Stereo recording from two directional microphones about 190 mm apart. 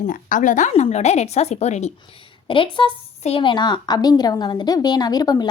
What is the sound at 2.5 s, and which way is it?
A woman's voice, 25° left (ahead or behind).